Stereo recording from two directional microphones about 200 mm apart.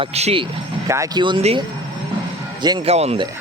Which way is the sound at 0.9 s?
20° right (ahead or behind).